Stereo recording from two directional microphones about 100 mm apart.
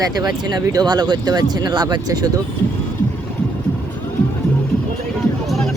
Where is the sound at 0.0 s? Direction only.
40° right (ahead or behind).